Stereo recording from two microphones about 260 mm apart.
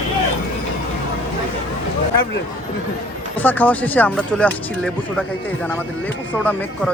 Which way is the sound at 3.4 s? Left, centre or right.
Centre.